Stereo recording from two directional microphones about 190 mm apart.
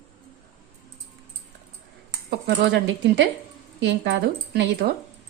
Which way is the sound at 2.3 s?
65° right (ahead or behind).